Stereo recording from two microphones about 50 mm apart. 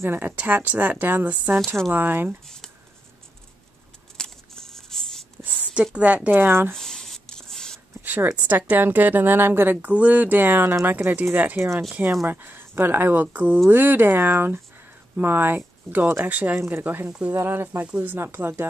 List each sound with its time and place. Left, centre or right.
0.0 s speech: right
0.4 s a woman's voice: right
1.9 s speech: right
2.4 s speech: centre
4.2 s a sound: centre
5.9 s speech: right
6.3 s speech: right
6.7 s a sound: centre
8.0 s a sound: right
8.4 s a woman's voice: right
9.8 s a woman's voice: right
16.5 s speech: right
16.8 s a woman's voice: right
18.2 s speech: right